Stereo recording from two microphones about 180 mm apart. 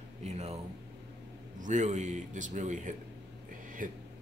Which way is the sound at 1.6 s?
40° right (ahead or behind).